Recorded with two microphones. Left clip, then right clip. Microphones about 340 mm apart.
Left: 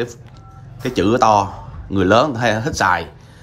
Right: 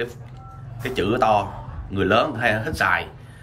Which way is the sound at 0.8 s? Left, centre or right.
Centre.